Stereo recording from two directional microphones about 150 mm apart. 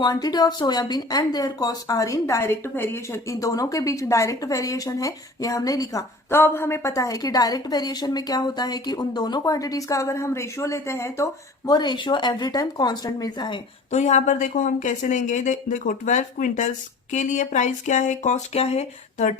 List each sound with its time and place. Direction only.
0.0 s speech: 25° left (ahead or behind)
13.9 s speech: 50° left (ahead or behind)